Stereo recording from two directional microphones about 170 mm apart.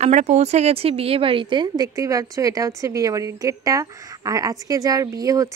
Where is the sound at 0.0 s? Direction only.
40° right (ahead or behind).